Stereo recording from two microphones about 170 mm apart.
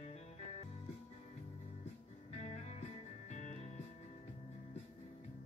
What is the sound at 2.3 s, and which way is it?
Music, 40° left (ahead or behind).